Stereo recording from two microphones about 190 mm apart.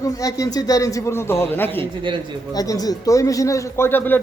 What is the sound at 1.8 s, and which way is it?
Speech, 25° right (ahead or behind).